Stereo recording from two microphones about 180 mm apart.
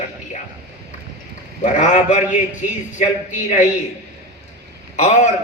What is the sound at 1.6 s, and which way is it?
A man's voice, 40° left (ahead or behind).